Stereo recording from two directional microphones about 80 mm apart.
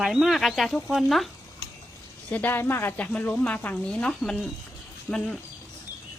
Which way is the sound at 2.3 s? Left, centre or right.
Left.